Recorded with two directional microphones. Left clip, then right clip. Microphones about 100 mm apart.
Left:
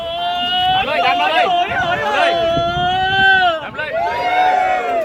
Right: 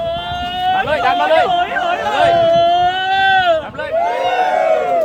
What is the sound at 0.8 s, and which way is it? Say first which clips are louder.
Speech: right 1 dB; 50° right (ahead or behind).